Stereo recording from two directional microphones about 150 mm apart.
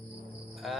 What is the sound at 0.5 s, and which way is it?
Music, centre (ahead or behind).